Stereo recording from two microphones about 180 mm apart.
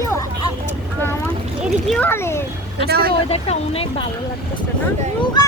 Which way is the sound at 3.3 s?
35° left (ahead or behind).